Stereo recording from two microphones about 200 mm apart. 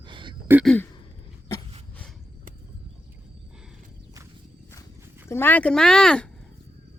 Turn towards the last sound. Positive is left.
turn(degrees=5)  # may be behind; listen again after turning